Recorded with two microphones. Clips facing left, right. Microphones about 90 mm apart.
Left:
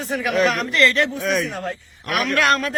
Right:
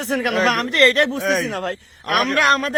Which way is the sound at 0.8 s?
50° right (ahead or behind).